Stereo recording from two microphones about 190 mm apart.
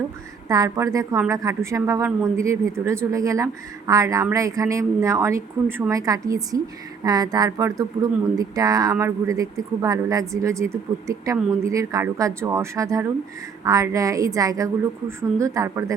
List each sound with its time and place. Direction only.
0.4 s speech: 20° right (ahead or behind)